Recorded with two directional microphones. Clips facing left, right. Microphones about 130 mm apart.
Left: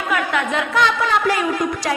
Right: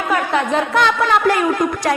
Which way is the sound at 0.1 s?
35° right (ahead or behind).